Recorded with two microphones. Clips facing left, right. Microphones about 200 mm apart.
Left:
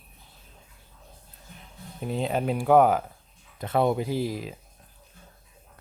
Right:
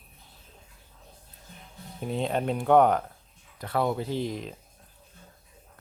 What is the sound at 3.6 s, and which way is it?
Speech, 20° left (ahead or behind).